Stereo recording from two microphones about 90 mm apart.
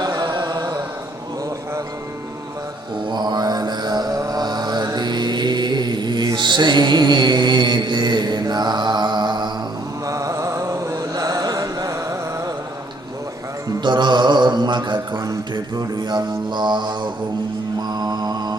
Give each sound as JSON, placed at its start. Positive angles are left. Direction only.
{"t": 0.0, "sound": "music", "side_deg": -55}
{"t": 3.1, "sound": "mantra", "side_deg": -55}
{"t": 10.1, "sound": "mantra", "side_deg": -35}
{"t": 13.7, "sound": "music", "side_deg": -55}
{"t": 15.5, "sound": "mantra", "side_deg": -50}